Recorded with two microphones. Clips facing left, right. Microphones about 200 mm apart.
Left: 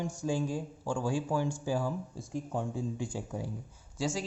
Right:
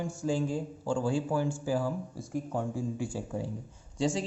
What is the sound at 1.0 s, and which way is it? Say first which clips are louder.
Speech: right 1 dB; 10° left (ahead or behind).